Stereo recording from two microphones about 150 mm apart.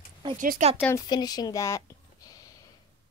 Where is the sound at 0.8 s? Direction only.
15° left (ahead or behind).